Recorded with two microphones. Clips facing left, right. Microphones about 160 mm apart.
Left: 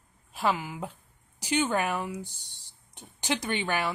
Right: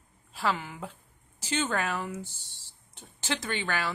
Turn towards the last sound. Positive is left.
turn(degrees=20)  # may be behind; listen again after turning